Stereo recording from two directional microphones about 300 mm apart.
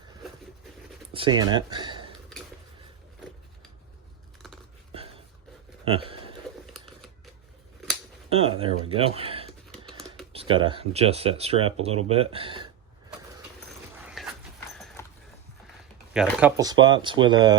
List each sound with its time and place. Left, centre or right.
1.1 s speech: centre
4.9 s a sound: centre
8.3 s speech: centre
13.9 s dog: centre
15.0 s horse: centre
16.1 s speech: centre
16.8 s speech: centre